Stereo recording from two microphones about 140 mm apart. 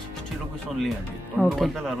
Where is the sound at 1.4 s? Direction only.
Centre (ahead or behind).